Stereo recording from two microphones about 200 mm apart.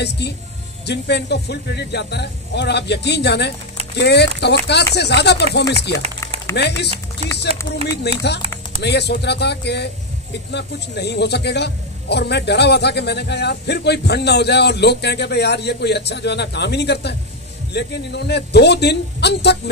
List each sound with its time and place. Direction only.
0.8 s a man's voice: 55° left (ahead or behind)
8.0 s a man's voice: 55° left (ahead or behind)